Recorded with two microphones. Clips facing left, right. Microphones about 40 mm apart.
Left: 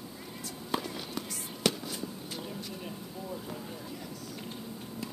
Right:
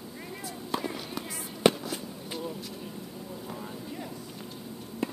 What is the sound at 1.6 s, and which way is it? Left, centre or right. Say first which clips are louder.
Fireworks: right 7 dB; right.